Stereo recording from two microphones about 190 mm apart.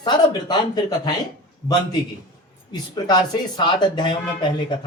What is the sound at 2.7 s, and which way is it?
Speech, 20° left (ahead or behind).